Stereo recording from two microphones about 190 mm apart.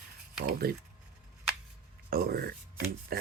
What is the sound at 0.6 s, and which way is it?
Speech, 55° right (ahead or behind).